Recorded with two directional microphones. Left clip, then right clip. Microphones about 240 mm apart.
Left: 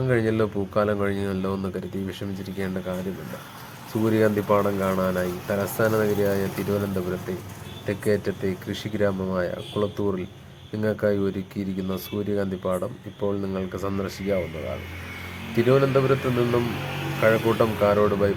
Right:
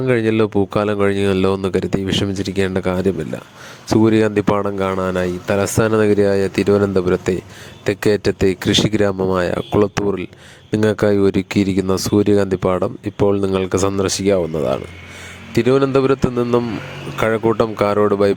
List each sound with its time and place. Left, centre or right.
0.1 s speech: right
4.0 s speech: right
15.5 s speech: right